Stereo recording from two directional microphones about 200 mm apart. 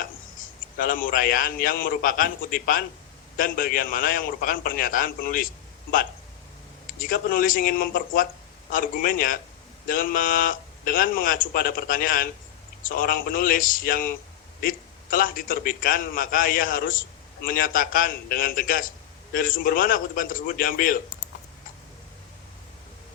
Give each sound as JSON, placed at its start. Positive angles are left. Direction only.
{"t": 0.8, "sound": "a man's voice", "side_deg": 45}
{"t": 7.0, "sound": "a man's voice", "side_deg": 45}